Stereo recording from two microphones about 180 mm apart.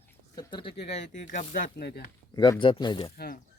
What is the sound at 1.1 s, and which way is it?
Speech, 45° left (ahead or behind).